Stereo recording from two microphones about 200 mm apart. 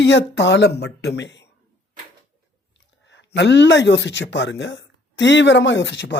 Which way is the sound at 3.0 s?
60° left (ahead or behind).